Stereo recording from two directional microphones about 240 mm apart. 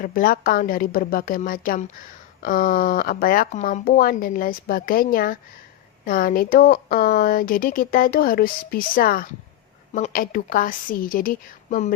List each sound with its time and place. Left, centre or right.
0.0 s speech: left